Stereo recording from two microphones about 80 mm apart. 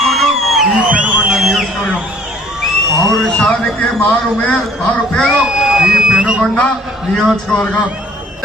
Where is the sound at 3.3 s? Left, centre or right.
Centre.